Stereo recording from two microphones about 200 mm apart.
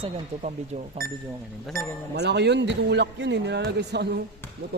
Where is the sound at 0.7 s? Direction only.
35° right (ahead or behind).